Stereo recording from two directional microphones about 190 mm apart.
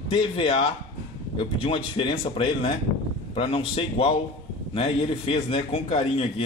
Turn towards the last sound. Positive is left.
turn(degrees=35)  # may be behind; listen again after turning